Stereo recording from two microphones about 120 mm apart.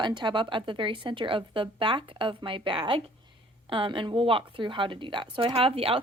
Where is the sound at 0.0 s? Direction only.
40° right (ahead or behind).